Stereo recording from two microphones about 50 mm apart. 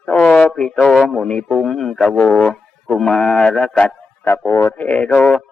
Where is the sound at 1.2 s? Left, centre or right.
Centre.